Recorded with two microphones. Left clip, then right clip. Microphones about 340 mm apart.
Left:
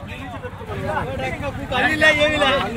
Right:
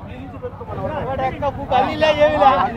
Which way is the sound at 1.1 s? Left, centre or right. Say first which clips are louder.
Right 5 dB; right.